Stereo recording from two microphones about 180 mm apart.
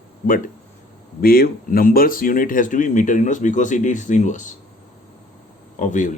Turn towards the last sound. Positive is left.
turn(degrees=45)  # may be behind; listen again after turning